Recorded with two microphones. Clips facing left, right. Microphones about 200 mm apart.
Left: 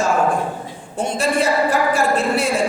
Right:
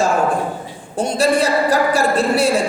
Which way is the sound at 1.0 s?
35° right (ahead or behind).